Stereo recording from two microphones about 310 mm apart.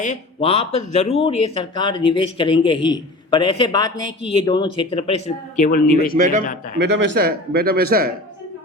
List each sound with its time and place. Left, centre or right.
0.0 s speech: left
3.8 s speech: right
4.3 s speech: centre
6.1 s speech: right